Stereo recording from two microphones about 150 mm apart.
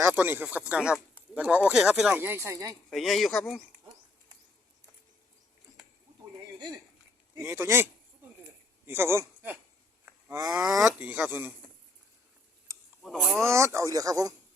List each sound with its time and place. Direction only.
0.0 s speech: 15° right (ahead or behind)
2.9 s speech: centre (ahead or behind)
7.3 s speech: 20° right (ahead or behind)
8.9 s speech: 15° right (ahead or behind)
10.1 s cattle: 20° right (ahead or behind)
10.5 s speech: 5° right (ahead or behind)
13.0 s speech: centre (ahead or behind)
13.4 s speech: 20° right (ahead or behind)